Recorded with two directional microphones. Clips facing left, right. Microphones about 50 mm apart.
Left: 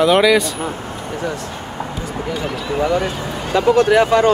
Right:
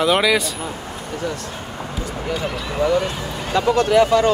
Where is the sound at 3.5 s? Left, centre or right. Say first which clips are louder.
Left 4 dB; centre.